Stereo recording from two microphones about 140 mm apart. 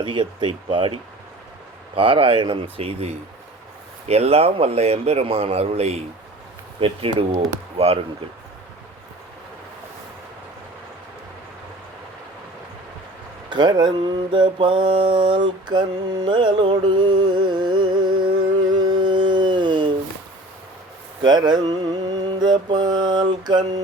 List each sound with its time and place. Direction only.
0.0 s speech: 35° right (ahead or behind)
2.0 s speech: 40° right (ahead or behind)
13.5 s mantra: 30° right (ahead or behind)
18.7 s carnatic music: 30° right (ahead or behind)
21.2 s speech: 30° right (ahead or behind)
22.4 s mantra: 30° right (ahead or behind)